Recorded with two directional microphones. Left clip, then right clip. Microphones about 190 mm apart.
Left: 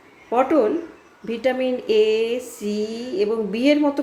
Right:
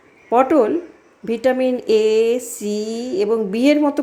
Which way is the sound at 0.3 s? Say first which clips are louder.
Right 4 dB; 35° right (ahead or behind).